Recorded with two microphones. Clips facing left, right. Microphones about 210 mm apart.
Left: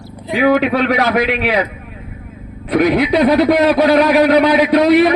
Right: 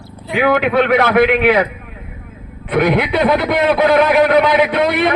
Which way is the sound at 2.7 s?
40° left (ahead or behind).